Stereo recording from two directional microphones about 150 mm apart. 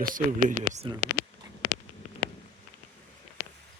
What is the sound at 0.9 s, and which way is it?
Speech, 35° right (ahead or behind).